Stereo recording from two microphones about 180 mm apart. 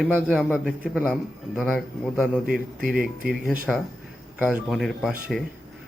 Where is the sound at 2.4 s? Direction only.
50° right (ahead or behind).